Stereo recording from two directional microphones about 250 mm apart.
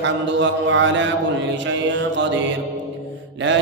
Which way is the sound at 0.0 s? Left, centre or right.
Right.